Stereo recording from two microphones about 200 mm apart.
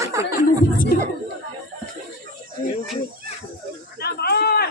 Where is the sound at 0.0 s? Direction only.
15° right (ahead or behind).